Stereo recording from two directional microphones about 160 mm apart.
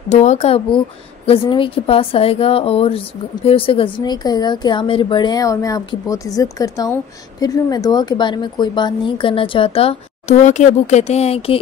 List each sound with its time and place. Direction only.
0.1 s speech: 45° left (ahead or behind)